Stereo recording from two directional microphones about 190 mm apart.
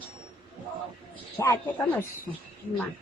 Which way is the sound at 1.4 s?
15° left (ahead or behind).